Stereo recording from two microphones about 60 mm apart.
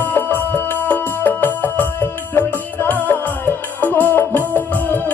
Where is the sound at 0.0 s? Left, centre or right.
Left.